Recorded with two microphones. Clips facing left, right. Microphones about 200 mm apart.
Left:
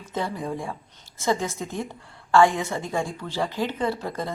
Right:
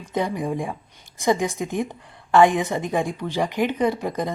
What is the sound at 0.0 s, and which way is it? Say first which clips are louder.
A woman's voice: right 5 dB; 15° right (ahead or behind).